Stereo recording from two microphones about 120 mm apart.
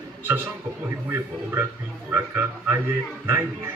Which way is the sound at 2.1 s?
20° right (ahead or behind).